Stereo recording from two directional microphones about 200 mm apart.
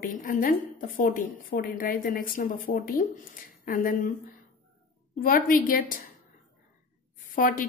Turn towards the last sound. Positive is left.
turn(degrees=45)  # may be behind; listen again after turning